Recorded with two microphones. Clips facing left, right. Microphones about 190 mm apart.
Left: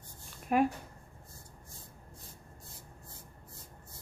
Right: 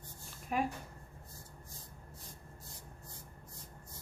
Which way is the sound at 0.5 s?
60° left (ahead or behind).